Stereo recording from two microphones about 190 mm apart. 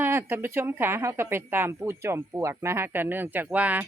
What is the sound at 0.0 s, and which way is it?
A woman's voice, 10° right (ahead or behind).